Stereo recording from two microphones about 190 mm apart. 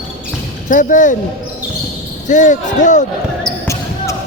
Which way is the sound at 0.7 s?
40° left (ahead or behind).